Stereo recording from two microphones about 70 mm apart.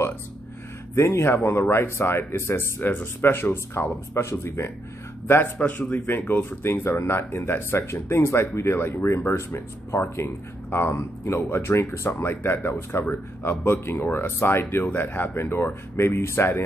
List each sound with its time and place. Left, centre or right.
0.9 s speech: left
5.6 s speech: left